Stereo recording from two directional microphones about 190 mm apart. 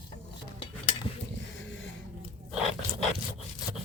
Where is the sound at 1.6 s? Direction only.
80° left.